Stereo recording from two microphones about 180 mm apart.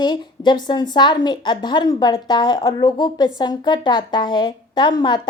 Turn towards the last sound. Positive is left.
turn(degrees=25)  # may be behind; listen again after turning